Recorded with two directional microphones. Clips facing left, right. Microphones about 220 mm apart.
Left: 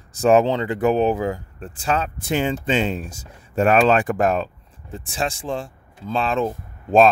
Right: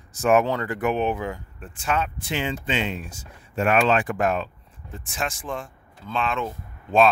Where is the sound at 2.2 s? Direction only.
45° left (ahead or behind).